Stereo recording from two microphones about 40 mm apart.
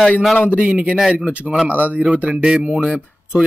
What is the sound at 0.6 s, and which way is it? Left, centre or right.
Speech, right.